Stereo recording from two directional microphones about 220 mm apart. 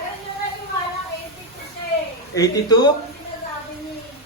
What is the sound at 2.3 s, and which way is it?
Speech, 15° left (ahead or behind).